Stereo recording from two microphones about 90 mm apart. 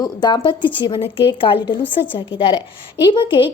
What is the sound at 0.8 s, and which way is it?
A woman's voice, 75° left (ahead or behind).